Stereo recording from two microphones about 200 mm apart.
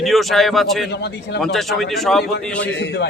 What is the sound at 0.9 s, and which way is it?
Speech, 55° left (ahead or behind).